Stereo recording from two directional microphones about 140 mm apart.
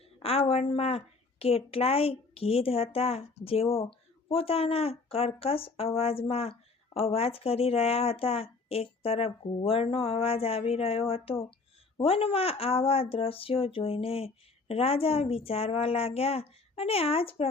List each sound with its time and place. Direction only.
0.2 s a woman's voice: 45° left (ahead or behind)